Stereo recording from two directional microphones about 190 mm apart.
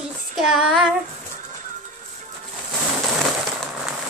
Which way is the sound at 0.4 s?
Centre (ahead or behind).